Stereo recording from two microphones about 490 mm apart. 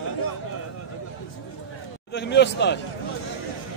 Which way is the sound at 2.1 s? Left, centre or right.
Left.